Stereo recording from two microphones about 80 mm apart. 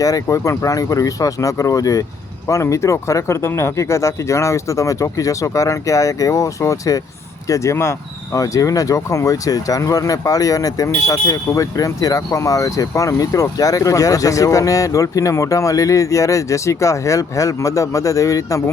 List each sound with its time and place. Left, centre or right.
0.0 s speech: left